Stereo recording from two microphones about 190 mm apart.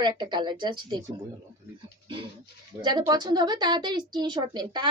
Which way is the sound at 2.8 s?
20° right (ahead or behind).